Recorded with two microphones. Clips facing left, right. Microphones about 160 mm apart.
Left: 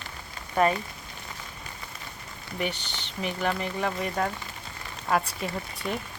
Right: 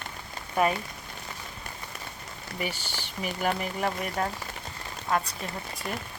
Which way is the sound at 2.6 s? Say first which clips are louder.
Left 3 dB; 5° right (ahead or behind).